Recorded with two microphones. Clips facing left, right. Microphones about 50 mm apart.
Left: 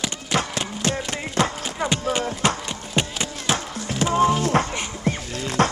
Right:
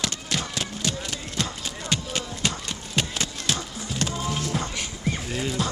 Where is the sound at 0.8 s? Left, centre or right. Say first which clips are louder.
Left 6 dB; left.